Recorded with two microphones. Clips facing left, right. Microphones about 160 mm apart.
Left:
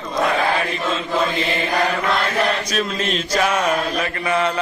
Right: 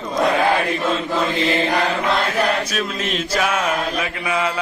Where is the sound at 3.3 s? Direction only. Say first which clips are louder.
Left 2 dB; 5° right (ahead or behind).